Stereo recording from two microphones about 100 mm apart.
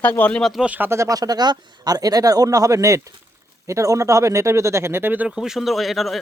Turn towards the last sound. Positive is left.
turn(degrees=0)  # may be behind; listen again after turning